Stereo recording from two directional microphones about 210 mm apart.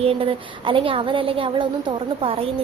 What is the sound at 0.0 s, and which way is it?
A woman's voice, 25° right (ahead or behind).